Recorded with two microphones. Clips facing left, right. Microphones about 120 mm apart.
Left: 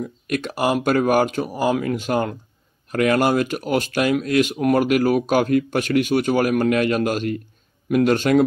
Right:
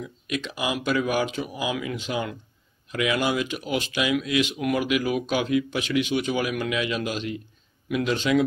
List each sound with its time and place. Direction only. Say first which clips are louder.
0.0 s speech: left 6 dB; 50° left (ahead or behind)